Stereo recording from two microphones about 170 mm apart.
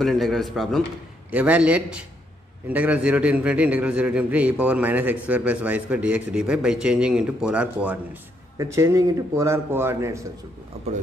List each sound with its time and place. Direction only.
0.0 s a man's voice: centre (ahead or behind)
8.5 s a man's voice: 20° right (ahead or behind)